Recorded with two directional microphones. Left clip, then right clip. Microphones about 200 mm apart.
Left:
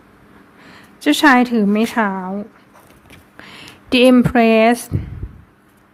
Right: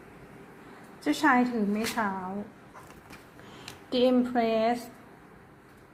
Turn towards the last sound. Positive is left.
turn(degrees=35)  # may be behind; listen again after turning